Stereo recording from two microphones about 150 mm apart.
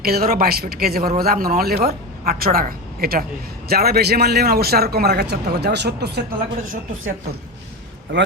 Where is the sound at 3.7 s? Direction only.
90° right.